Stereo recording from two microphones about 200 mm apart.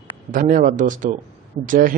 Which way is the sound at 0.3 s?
40° right (ahead or behind).